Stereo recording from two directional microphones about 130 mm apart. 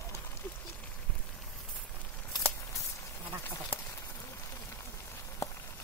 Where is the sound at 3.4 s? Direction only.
20° left (ahead or behind).